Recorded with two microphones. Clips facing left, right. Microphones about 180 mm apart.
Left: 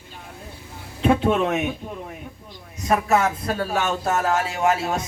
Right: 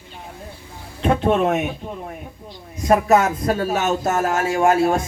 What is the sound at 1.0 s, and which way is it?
Speech, 40° right (ahead or behind).